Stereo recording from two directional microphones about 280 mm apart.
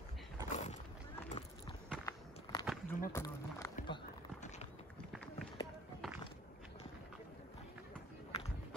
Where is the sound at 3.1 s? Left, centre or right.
Centre.